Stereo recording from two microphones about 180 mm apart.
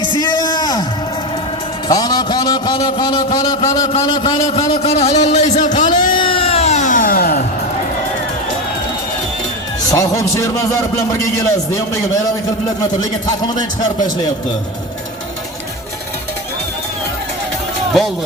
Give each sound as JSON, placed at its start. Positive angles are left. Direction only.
{"t": 0.1, "sound": "a sound", "side_deg": 20}
{"t": 1.9, "sound": "a man's voice", "side_deg": 20}
{"t": 6.1, "sound": "music", "side_deg": 30}
{"t": 9.9, "sound": "a man's voice", "side_deg": 15}
{"t": 13.5, "sound": "a man's voice", "side_deg": 20}